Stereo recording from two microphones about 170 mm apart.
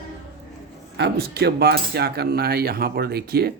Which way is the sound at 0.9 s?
75° right (ahead or behind).